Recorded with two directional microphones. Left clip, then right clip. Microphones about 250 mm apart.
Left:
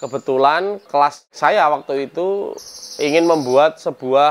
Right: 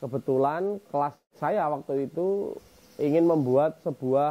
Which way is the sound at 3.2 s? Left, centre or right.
Centre.